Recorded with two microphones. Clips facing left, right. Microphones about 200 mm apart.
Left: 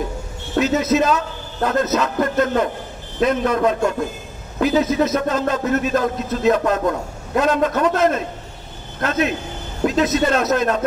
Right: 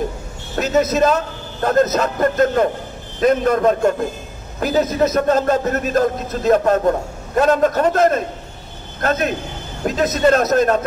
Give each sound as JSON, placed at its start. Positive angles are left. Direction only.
{"t": 0.6, "sound": "a man's voice", "side_deg": -45}